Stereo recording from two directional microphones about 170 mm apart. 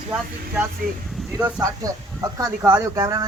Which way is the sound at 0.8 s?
55° right (ahead or behind).